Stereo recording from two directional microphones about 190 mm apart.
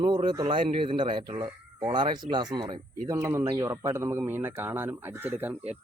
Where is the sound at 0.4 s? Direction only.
25° right (ahead or behind).